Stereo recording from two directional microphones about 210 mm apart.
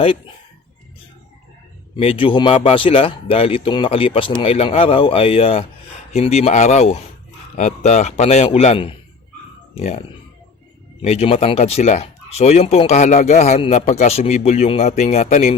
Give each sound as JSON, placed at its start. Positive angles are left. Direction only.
{"t": 2.0, "sound": "speech", "side_deg": 25}
{"t": 11.0, "sound": "speech", "side_deg": 30}